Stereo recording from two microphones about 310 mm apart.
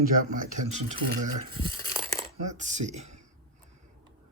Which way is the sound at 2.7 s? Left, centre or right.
Right.